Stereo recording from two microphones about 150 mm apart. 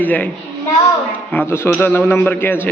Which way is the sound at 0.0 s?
10° left (ahead or behind).